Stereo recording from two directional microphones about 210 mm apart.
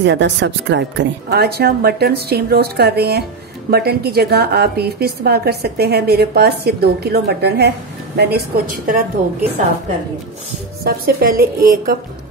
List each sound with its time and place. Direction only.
0.0 s a woman's voice: 55° right (ahead or behind); by 9.0 s 40° right (ahead or behind)
10.8 s a woman's voice: 45° right (ahead or behind)